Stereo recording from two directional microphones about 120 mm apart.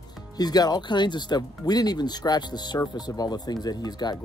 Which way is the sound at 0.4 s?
35° left (ahead or behind).